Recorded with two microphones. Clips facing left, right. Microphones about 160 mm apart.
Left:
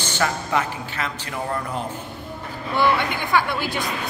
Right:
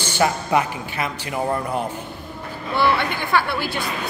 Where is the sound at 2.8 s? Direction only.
15° left (ahead or behind).